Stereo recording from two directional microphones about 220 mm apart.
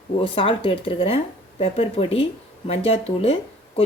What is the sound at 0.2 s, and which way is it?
Speech, 25° left (ahead or behind).